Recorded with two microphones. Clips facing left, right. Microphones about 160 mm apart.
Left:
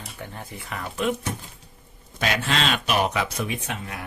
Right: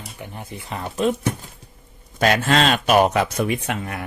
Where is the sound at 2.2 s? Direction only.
45° right (ahead or behind); by 4.0 s 65° right (ahead or behind).